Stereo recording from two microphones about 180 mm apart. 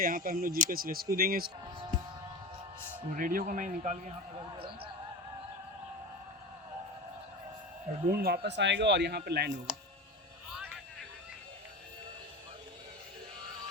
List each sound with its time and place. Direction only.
0.0 s speech: 50° right (ahead or behind)
3.2 s speech: 50° right (ahead or behind)
8.1 s speech: 60° right (ahead or behind)
9.7 s clicking: 5° right (ahead or behind)